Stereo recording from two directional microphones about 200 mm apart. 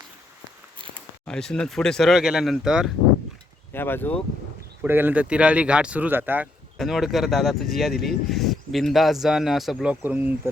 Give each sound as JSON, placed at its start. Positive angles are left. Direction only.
{"t": 1.3, "sound": "speech", "side_deg": 5}
{"t": 3.7, "sound": "speech", "side_deg": 10}
{"t": 4.8, "sound": "speech", "side_deg": -10}